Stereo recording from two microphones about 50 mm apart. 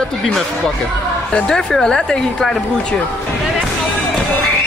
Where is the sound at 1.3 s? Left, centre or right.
Centre.